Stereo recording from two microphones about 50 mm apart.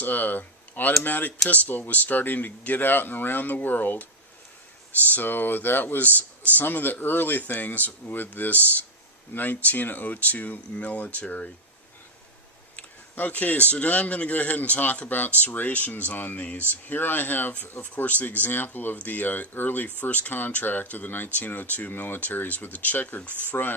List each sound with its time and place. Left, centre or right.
0.0 s speech: left
5.1 s speech: left
12.7 s speech: left